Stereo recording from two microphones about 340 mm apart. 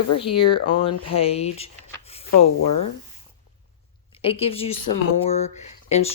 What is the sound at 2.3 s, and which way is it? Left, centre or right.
Speech, left.